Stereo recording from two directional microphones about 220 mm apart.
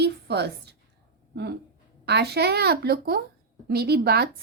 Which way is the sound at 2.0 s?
50° right (ahead or behind).